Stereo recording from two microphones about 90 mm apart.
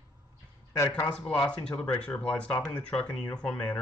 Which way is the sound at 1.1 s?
10° left (ahead or behind).